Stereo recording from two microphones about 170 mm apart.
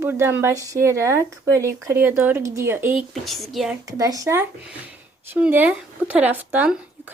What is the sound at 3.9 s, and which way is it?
Speech, 20° right (ahead or behind).